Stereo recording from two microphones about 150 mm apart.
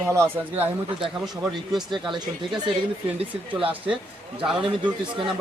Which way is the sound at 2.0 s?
30° right (ahead or behind).